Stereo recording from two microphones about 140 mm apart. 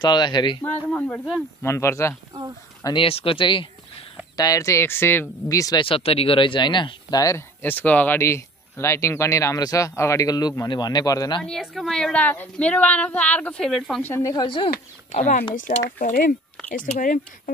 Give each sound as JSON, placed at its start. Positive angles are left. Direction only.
{"t": 0.0, "sound": "speech", "side_deg": 30}
{"t": 0.8, "sound": "a woman's voice", "side_deg": 10}
{"t": 1.6, "sound": "speech", "side_deg": 20}
{"t": 2.8, "sound": "speech", "side_deg": 35}
{"t": 4.4, "sound": "speech", "side_deg": 25}
{"t": 5.8, "sound": "speech", "side_deg": 40}
{"t": 11.4, "sound": "a woman's voice", "side_deg": 0}
{"t": 14.0, "sound": "a woman's voice", "side_deg": 15}
{"t": 14.3, "sound": "speech", "side_deg": 35}
{"t": 14.7, "sound": "speech", "side_deg": 65}
{"t": 15.5, "sound": "speech", "side_deg": 75}
{"t": 16.6, "sound": "speech", "side_deg": 65}